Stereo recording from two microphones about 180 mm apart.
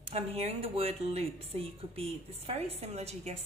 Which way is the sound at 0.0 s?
35° right (ahead or behind).